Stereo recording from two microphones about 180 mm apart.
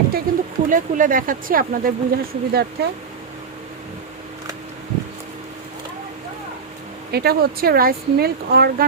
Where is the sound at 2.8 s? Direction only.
65° right (ahead or behind).